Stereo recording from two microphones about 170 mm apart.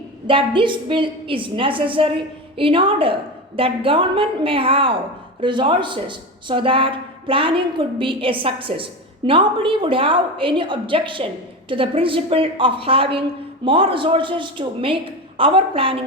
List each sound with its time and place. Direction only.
0.3 s a woman's voice: 30° right (ahead or behind)